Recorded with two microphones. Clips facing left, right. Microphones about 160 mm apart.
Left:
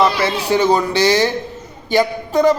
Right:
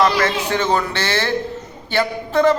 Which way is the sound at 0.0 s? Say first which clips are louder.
Left 1 dB; 10° left (ahead or behind).